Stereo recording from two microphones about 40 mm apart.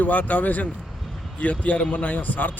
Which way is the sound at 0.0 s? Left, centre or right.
Left.